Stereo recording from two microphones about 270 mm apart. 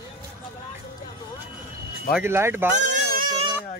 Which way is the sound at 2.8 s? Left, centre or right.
Right.